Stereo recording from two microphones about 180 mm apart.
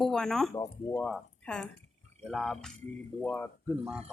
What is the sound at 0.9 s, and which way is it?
A woman's voice, 5° left (ahead or behind).